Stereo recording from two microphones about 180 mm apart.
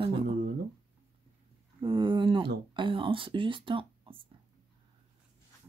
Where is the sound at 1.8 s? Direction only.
25° right (ahead or behind).